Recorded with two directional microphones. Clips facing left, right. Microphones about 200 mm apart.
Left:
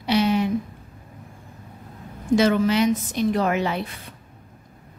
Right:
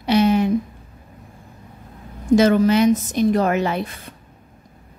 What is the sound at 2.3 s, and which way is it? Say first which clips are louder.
Speech: right 4 dB; 45° right (ahead or behind).